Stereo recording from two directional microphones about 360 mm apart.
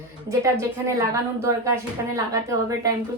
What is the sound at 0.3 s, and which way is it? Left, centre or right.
Speech, centre.